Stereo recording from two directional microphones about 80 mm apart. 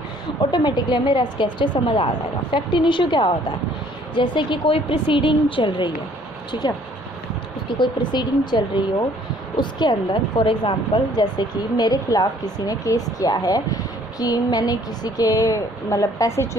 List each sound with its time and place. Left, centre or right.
0.4 s a woman's voice: left
7.8 s a woman's voice: left
11.1 s speech: left